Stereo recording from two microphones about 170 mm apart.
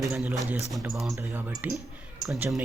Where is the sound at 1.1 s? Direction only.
10° right (ahead or behind).